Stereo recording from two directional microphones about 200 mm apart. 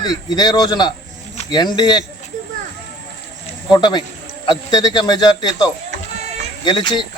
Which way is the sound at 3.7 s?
20° left (ahead or behind).